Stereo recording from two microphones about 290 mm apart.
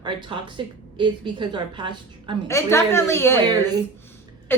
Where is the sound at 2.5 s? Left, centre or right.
Centre.